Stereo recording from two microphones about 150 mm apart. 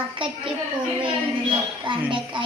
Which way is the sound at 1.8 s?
35° right (ahead or behind).